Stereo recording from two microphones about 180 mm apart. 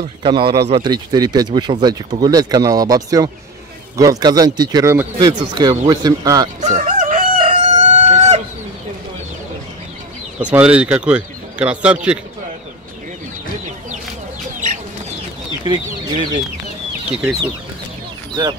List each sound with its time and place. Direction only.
0.2 s speech: 30° right (ahead or behind)
6.6 s fowl: 40° right (ahead or behind)
7.4 s crowing: 35° right (ahead or behind)
10.4 s a man's voice: 5° right (ahead or behind)
15.6 s speech: 25° right (ahead or behind)
17.1 s speech: centre (ahead or behind)